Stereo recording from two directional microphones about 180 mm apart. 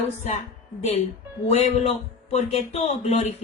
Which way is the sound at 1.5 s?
35° left (ahead or behind).